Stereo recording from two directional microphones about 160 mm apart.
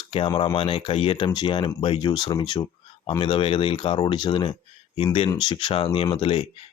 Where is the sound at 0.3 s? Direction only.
25° left (ahead or behind).